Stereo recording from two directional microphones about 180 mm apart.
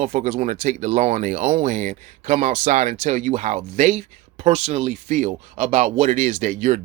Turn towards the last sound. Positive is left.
turn(degrees=-45)  # may be behind; listen again after turning